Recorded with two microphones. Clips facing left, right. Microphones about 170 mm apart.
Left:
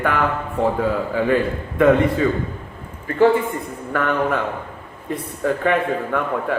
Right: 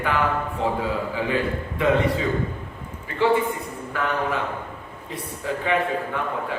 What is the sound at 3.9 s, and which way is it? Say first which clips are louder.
A man's voice: left 5 dB; 55° left (ahead or behind).